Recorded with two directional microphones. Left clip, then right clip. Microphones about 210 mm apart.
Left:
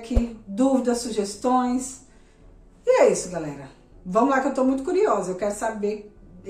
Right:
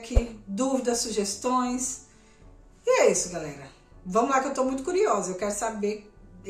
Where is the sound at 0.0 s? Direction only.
Centre (ahead or behind).